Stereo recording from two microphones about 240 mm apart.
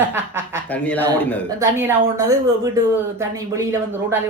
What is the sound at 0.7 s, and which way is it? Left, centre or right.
Speech, centre.